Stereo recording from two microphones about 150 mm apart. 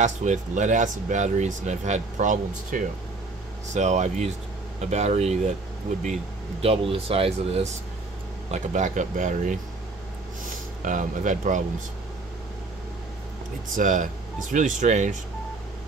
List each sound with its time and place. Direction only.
0.0 s speech: 50° right (ahead or behind)
6.6 s speech: 40° right (ahead or behind); by 9.6 s 60° right (ahead or behind)
10.8 s speech: 60° right (ahead or behind)
13.7 s speech: 55° right (ahead or behind)